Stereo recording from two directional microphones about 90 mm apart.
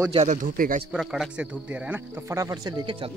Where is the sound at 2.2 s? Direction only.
35° right (ahead or behind).